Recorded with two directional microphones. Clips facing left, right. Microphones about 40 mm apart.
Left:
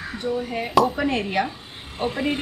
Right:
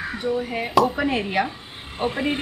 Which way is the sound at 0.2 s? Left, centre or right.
Centre.